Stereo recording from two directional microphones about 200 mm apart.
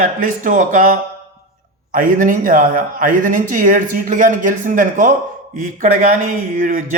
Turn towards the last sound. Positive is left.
turn(degrees=-40)  # may be behind; listen again after turning